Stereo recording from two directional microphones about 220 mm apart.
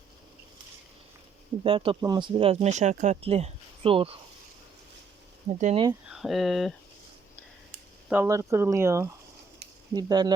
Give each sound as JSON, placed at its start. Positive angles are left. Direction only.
{"t": 1.6, "sound": "speech", "side_deg": -25}
{"t": 5.5, "sound": "speech", "side_deg": -30}
{"t": 6.1, "sound": "speech", "side_deg": 0}
{"t": 8.1, "sound": "speech", "side_deg": -10}